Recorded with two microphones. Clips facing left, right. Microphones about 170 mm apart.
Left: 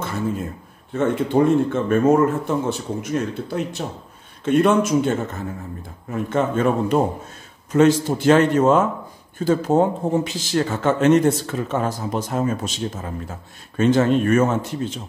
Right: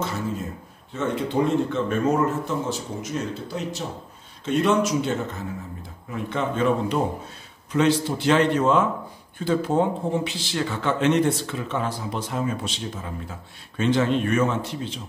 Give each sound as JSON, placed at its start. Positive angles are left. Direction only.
{"t": 0.9, "sound": "speech", "side_deg": 55}